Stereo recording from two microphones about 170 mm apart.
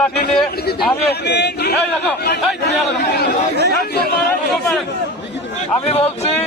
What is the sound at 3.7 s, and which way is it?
Speech, 70° left (ahead or behind).